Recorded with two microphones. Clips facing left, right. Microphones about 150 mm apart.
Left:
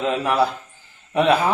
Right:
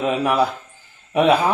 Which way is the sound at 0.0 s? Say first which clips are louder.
Right 1 dB; 15° right (ahead or behind).